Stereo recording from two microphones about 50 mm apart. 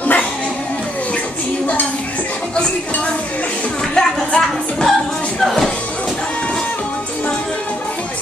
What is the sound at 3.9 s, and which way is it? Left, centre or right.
Music, centre.